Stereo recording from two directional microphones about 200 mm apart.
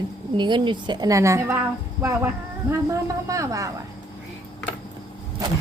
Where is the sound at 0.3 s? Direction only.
25° right (ahead or behind).